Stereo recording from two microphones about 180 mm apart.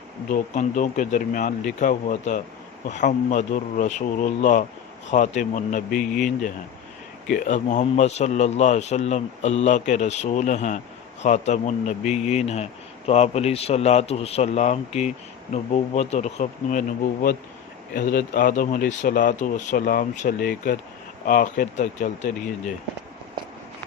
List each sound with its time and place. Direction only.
0.3 s a man's voice: 45° left (ahead or behind)
17.9 s speech: 50° left (ahead or behind)